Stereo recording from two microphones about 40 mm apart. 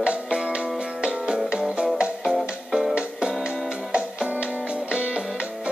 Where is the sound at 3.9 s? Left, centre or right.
Right.